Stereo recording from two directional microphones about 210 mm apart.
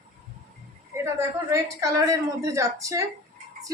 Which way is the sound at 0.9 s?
15° right (ahead or behind).